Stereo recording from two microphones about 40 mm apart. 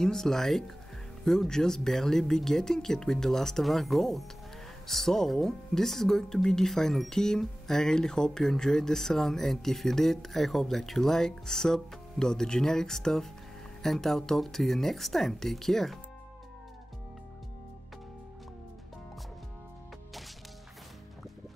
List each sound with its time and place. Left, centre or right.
0.0 s speech: centre